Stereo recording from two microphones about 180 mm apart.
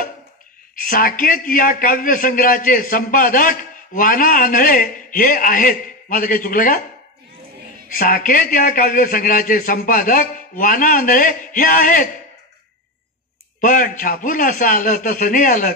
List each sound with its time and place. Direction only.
0.8 s a man's voice: 50° left (ahead or behind)
7.9 s a man's voice: 50° left (ahead or behind)
13.6 s a man's voice: 50° left (ahead or behind)